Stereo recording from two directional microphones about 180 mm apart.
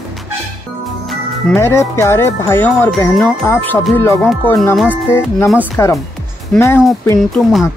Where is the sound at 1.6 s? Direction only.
15° left (ahead or behind).